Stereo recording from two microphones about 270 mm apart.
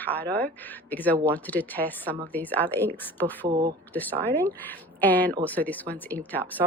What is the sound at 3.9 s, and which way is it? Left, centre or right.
A woman's voice, centre.